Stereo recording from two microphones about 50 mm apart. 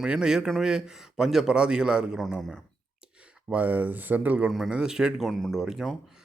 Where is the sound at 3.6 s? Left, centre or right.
Right.